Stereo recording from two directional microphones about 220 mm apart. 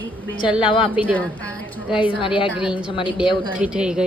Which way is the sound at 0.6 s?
25° left (ahead or behind).